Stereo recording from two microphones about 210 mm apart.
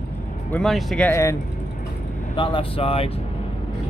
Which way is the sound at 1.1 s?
15° left (ahead or behind).